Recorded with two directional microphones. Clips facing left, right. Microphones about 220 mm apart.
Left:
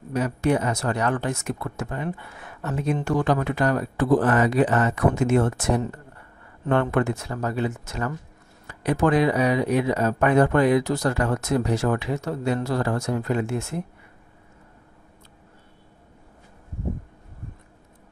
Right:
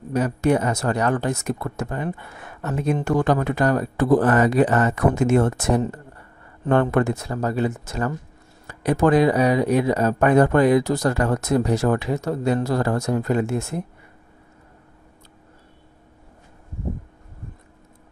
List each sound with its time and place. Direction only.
0.1 s speech: 40° right (ahead or behind)